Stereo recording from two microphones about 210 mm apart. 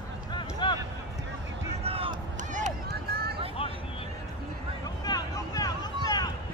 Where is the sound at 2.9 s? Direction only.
50° right (ahead or behind).